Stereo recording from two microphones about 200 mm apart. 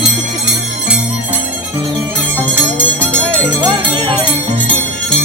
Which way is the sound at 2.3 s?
5° left (ahead or behind).